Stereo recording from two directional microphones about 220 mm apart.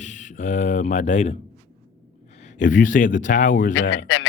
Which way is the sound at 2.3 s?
30° left (ahead or behind).